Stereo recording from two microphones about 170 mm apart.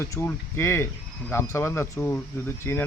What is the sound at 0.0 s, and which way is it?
Speech, 15° left (ahead or behind).